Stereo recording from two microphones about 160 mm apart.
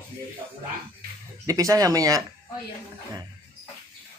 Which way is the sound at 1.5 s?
20° right (ahead or behind).